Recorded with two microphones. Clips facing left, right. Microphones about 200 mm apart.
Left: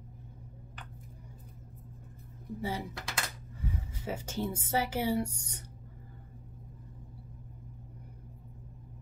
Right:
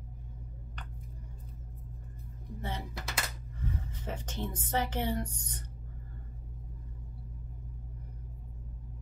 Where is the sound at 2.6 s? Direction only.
10° left (ahead or behind).